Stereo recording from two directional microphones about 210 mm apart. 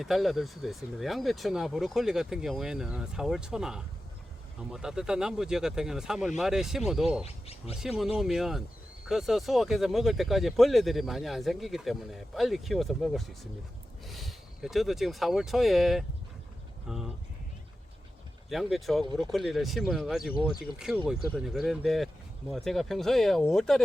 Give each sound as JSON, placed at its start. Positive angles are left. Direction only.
{"t": 0.0, "sound": "speech", "side_deg": 0}
{"t": 7.3, "sound": "speech", "side_deg": 30}
{"t": 7.8, "sound": "speech", "side_deg": 0}
{"t": 18.4, "sound": "speech", "side_deg": 0}